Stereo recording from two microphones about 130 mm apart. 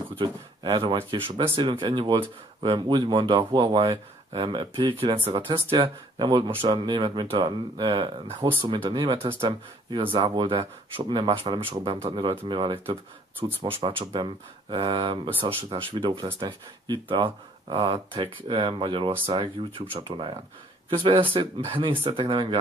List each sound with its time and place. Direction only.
0.2 s speech: 40° right (ahead or behind)